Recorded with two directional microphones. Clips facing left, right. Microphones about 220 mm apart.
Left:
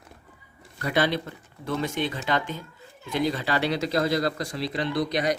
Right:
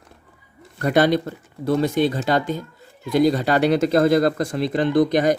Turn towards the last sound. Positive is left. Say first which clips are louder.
# right 8 dB
turn(degrees=-50)  # may be behind; listen again after turning